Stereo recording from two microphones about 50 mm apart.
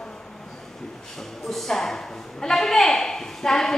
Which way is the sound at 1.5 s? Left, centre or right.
Centre.